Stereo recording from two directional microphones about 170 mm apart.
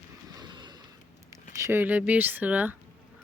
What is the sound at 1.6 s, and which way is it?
Speech, 15° right (ahead or behind).